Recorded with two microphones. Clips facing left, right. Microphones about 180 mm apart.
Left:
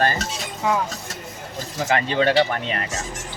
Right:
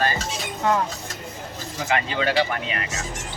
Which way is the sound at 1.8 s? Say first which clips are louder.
Left 4 dB; 40° left (ahead or behind).